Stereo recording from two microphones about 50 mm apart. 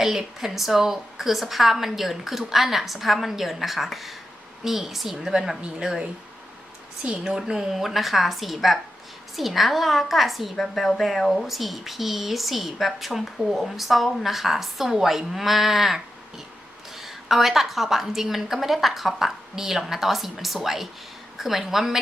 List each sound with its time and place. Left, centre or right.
0.0 s a woman's voice: centre
7.3 s speech: centre
17.0 s a woman's voice: centre